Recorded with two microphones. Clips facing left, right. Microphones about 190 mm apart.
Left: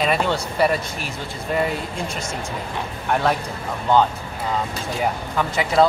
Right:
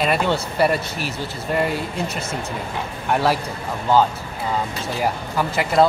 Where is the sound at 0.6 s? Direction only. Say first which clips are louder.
Even; centre (ahead or behind).